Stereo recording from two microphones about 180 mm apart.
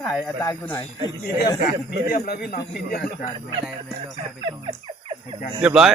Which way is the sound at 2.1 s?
55° left (ahead or behind).